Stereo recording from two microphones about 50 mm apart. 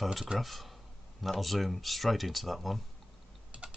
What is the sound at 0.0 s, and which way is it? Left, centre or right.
Speech, centre.